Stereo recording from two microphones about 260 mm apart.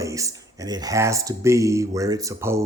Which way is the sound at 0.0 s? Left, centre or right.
Centre.